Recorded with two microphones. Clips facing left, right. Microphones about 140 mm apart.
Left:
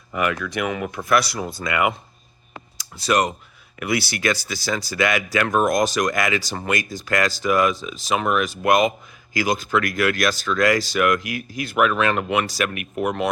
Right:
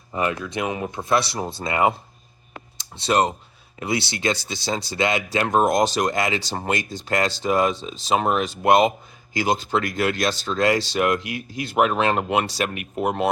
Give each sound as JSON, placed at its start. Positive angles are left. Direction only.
{"t": 0.1, "sound": "speech", "side_deg": -25}